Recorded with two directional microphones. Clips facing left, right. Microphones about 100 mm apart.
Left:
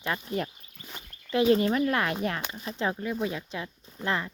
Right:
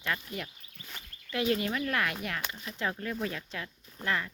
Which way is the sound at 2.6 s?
30° left (ahead or behind).